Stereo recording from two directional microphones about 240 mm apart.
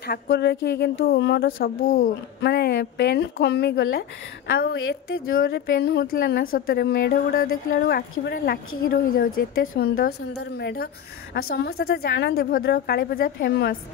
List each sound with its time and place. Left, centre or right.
0.0 s a woman's voice: left
11.3 s a woman's voice: left